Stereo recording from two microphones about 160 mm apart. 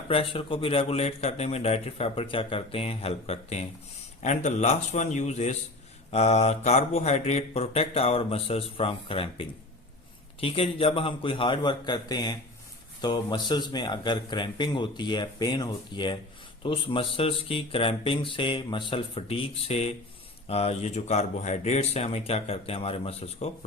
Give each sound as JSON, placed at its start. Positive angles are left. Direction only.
{"t": 0.1, "sound": "a man's voice", "side_deg": 35}